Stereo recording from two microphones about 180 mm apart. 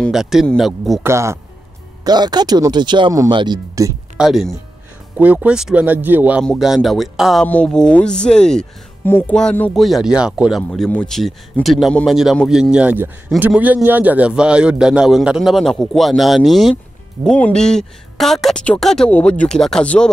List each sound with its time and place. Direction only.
0.0 s a man's voice: centre (ahead or behind)
1.0 s speech: 15° right (ahead or behind)
4.2 s a man's voice: centre (ahead or behind)
10.7 s a man's voice: 5° left (ahead or behind)